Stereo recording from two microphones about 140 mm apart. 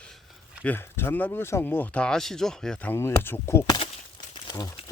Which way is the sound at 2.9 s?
15° left (ahead or behind).